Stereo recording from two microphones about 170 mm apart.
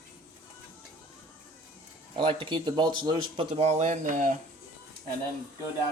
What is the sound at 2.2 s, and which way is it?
Speech, 30° right (ahead or behind).